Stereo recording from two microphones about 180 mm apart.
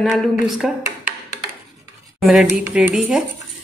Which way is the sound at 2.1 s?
Centre (ahead or behind).